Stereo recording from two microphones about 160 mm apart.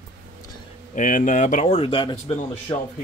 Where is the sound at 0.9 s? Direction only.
55° left (ahead or behind).